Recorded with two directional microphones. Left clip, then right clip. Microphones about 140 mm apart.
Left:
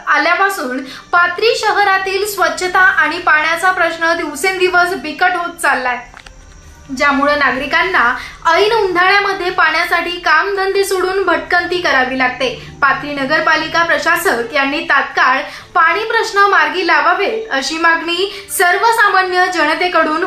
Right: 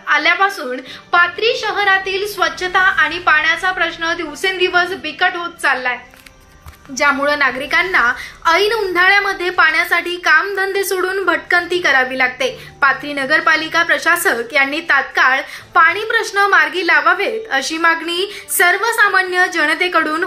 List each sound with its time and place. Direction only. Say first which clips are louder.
0.0 s a woman's voice: left 1 dB; 10° right (ahead or behind)
7.0 s a woman's voice: left 1 dB; 40° right (ahead or behind)
7.7 s a woman's voice: left 1 dB; 20° right (ahead or behind)